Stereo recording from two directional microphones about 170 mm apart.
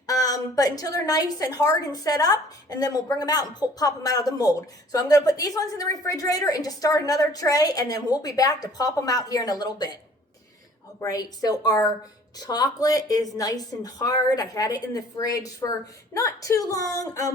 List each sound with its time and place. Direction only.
0.1 s a woman's voice: 20° left (ahead or behind)
11.0 s a woman's voice: 20° left (ahead or behind)